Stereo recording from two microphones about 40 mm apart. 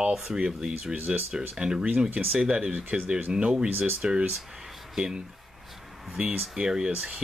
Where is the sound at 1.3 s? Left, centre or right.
Centre.